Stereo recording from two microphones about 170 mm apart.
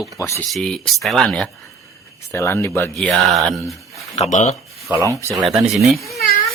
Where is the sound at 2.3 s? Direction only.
15° left (ahead or behind).